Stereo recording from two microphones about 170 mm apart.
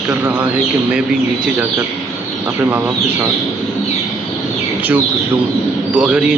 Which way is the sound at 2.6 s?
10° right (ahead or behind).